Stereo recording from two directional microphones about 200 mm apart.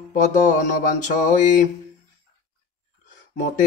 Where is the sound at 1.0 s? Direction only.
40° left (ahead or behind).